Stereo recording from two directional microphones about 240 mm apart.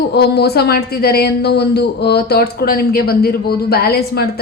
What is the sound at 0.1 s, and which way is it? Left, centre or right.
A woman's voice, left.